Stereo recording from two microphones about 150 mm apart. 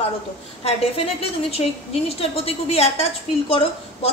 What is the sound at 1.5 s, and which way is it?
A woman's voice, 40° left (ahead or behind).